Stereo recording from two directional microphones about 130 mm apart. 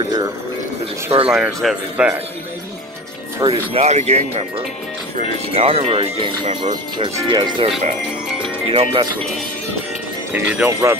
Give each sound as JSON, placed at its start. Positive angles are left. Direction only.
{"t": 1.2, "sound": "speech", "side_deg": -5}
{"t": 3.4, "sound": "speech", "side_deg": -50}
{"t": 6.6, "sound": "speech", "side_deg": -35}
{"t": 8.6, "sound": "speech", "side_deg": -45}
{"t": 10.3, "sound": "speech", "side_deg": -15}